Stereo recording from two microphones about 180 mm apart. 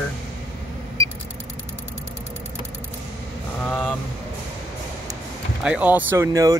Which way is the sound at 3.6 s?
10° left (ahead or behind).